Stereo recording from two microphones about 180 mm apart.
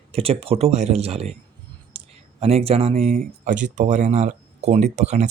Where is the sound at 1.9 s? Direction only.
35° right (ahead or behind).